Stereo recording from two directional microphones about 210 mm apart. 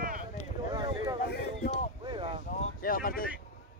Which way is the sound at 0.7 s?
20° right (ahead or behind).